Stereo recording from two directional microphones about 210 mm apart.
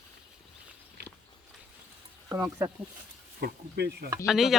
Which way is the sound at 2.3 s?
15° right (ahead or behind).